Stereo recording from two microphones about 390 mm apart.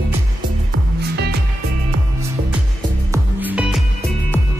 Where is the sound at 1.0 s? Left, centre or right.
Right.